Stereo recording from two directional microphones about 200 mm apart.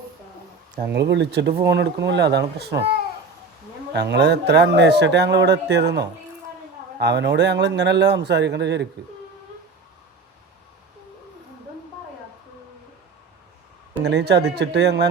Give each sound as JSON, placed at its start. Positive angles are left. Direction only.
{"t": 0.9, "sound": "speech", "side_deg": -60}
{"t": 3.9, "sound": "speech", "side_deg": -55}
{"t": 14.0, "sound": "speech", "side_deg": -60}